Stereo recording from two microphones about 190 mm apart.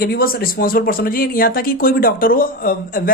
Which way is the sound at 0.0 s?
50° left (ahead or behind).